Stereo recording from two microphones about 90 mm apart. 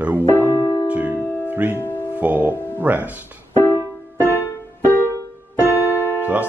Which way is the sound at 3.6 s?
30° left (ahead or behind).